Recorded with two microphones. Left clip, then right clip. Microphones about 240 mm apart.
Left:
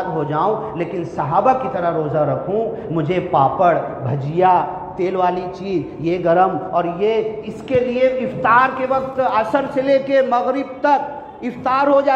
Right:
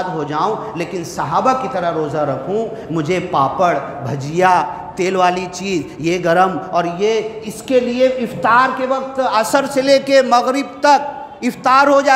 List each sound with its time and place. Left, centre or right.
0.3 s a man's voice: right